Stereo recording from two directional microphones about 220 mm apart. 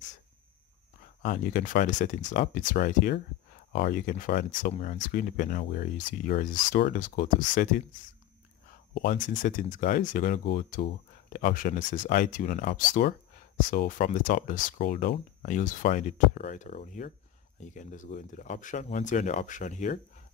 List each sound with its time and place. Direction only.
1.2 s speech: 35° left (ahead or behind)
8.9 s speech: 40° left (ahead or behind)